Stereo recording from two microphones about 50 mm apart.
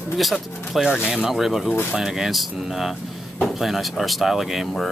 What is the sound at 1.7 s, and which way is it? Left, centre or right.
Speech, left.